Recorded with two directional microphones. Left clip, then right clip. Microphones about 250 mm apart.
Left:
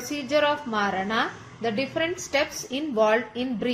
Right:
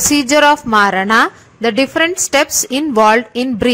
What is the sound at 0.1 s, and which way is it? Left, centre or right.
A woman's voice, right.